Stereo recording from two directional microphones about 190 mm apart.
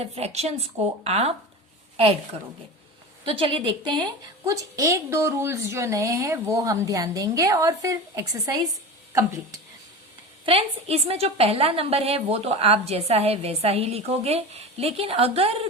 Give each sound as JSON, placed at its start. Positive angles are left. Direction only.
{"t": 0.0, "sound": "a woman's voice", "side_deg": -35}
{"t": 3.2, "sound": "a woman's voice", "side_deg": -30}
{"t": 10.4, "sound": "a woman's voice", "side_deg": -30}